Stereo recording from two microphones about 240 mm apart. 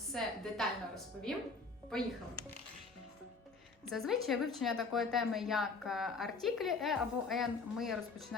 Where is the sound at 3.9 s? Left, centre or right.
Centre.